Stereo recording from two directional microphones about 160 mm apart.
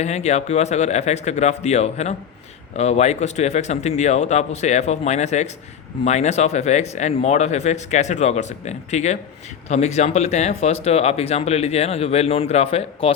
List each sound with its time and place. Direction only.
0.0 s speech: 45° left (ahead or behind)